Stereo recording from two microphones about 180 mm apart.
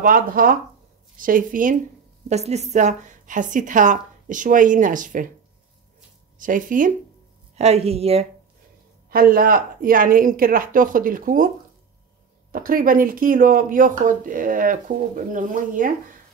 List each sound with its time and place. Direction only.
0.0 s speech: 50° right (ahead or behind)
2.2 s speech: 40° right (ahead or behind)
6.3 s speech: 50° right (ahead or behind)
7.5 s a woman's voice: 35° right (ahead or behind)
9.1 s speech: 55° right (ahead or behind)